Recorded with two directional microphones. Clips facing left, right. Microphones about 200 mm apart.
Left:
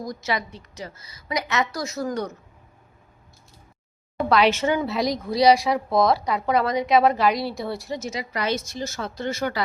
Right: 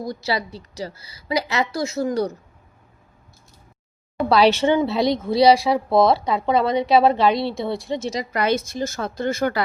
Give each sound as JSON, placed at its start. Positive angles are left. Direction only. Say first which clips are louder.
{"t": 0.0, "sound": "a woman's voice", "louder": "right 3 dB", "side_deg": -30}
{"t": 4.3, "sound": "speech", "louder": "right 4 dB", "side_deg": -35}
{"t": 8.3, "sound": "a woman's voice", "louder": "right 5 dB", "side_deg": -55}